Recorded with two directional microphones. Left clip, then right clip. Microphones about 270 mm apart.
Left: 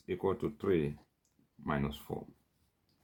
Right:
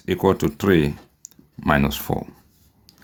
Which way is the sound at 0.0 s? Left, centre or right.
Right.